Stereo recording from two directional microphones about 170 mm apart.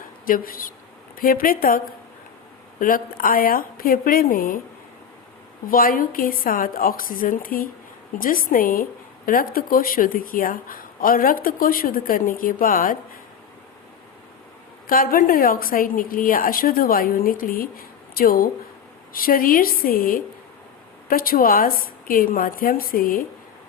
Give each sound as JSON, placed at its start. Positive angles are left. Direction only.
{"t": 0.3, "sound": "a woman's voice", "side_deg": 55}
{"t": 5.6, "sound": "a woman's voice", "side_deg": 55}
{"t": 14.8, "sound": "a woman's voice", "side_deg": 60}